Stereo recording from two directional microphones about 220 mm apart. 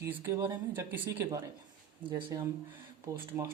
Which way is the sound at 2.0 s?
20° right (ahead or behind).